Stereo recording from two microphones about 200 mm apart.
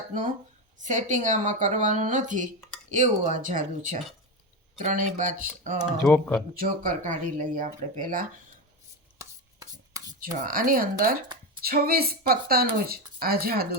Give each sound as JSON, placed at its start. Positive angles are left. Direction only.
{"t": 0.1, "sound": "speech", "side_deg": -40}
{"t": 5.8, "sound": "speech", "side_deg": 0}
{"t": 6.5, "sound": "speech", "side_deg": -45}
{"t": 9.1, "sound": "chopping", "side_deg": -15}
{"t": 10.4, "sound": "a woman's voice", "side_deg": -45}